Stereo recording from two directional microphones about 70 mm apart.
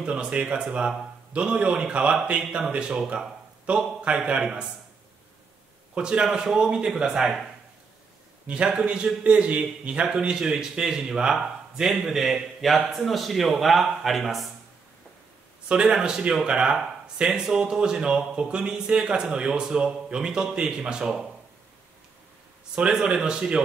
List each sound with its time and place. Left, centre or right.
0.0 s speech: centre
5.9 s speech: centre
8.5 s speech: centre
15.7 s speech: centre
22.8 s speech: centre